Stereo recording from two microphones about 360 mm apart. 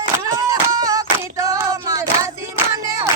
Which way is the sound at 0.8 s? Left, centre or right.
Centre.